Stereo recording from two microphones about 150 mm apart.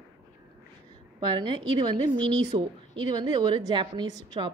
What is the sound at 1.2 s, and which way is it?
A woman's voice, 30° right (ahead or behind).